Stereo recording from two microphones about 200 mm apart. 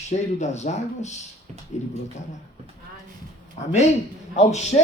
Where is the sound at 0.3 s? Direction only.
35° left (ahead or behind).